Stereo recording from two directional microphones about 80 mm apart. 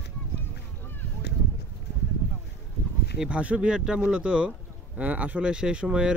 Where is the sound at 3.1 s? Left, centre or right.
Centre.